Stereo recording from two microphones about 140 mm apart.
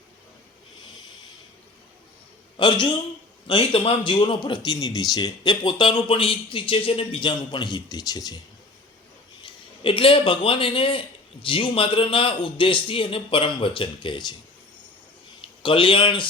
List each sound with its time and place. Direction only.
2.6 s speech: 35° left (ahead or behind)
9.4 s a man's voice: 40° left (ahead or behind)
15.4 s speech: 40° left (ahead or behind)